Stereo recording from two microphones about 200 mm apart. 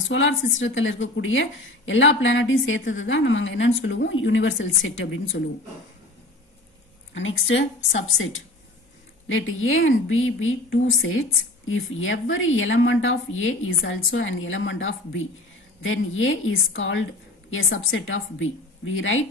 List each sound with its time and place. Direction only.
0.1 s speech: 70° left (ahead or behind)
7.2 s speech: 70° left (ahead or behind)
9.3 s a woman's voice: 85° left